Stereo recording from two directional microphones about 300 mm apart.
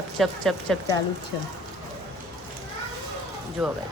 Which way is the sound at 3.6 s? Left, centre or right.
Centre.